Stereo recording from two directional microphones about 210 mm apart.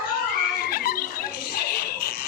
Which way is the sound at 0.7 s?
45° left (ahead or behind).